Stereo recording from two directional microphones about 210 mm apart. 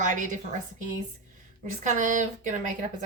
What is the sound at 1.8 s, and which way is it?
Speech, 35° right (ahead or behind).